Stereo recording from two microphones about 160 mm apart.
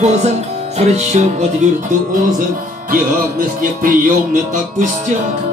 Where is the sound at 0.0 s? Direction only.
45° right (ahead or behind).